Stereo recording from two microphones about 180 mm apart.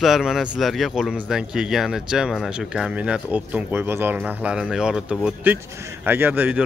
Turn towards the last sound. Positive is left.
turn(degrees=-10)  # may be behind; listen again after turning